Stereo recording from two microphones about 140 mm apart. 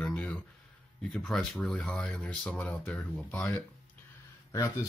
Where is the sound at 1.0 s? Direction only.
5° left (ahead or behind).